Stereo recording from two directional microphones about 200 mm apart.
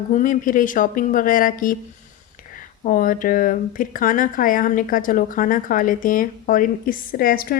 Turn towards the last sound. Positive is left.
turn(degrees=45)  # may be behind; listen again after turning